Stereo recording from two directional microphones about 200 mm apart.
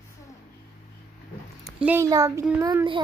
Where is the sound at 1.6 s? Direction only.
10° right (ahead or behind).